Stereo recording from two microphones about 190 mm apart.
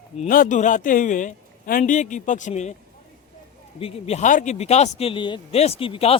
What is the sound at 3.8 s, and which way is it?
A man's voice, 30° left (ahead or behind).